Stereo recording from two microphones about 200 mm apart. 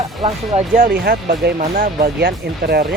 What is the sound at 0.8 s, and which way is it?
Speech, 50° right (ahead or behind).